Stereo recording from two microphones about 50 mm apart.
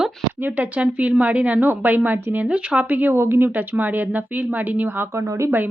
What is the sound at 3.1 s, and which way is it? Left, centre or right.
A woman's voice, right.